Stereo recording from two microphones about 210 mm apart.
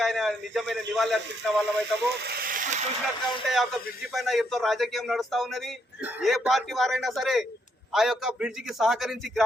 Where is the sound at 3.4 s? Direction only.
Centre (ahead or behind).